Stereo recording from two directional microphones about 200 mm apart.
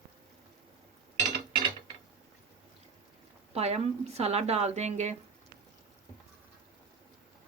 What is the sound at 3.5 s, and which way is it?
Speech, 30° right (ahead or behind).